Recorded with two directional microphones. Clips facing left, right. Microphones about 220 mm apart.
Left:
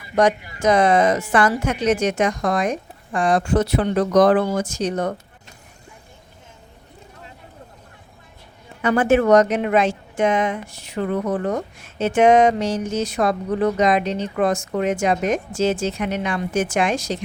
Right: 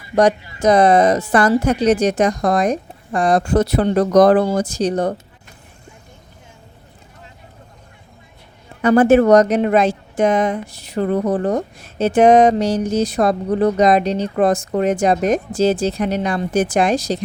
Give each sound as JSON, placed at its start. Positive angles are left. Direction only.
{"t": 0.2, "sound": "a woman's voice", "side_deg": -35}
{"t": 8.8, "sound": "a woman's voice", "side_deg": -40}